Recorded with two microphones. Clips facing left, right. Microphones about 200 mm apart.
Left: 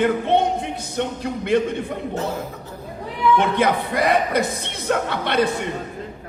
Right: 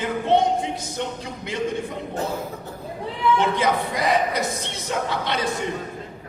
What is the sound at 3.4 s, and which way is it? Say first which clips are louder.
A man's voice: left 2 dB; 60° left (ahead or behind).